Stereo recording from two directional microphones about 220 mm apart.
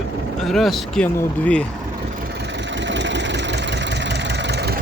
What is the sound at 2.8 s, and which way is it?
Vehicle, 55° right (ahead or behind).